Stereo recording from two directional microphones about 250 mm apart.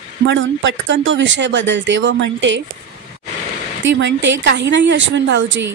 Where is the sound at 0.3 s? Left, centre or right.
Right.